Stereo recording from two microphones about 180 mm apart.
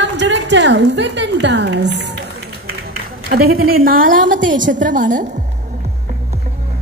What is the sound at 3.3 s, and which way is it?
A woman's voice, 55° right (ahead or behind).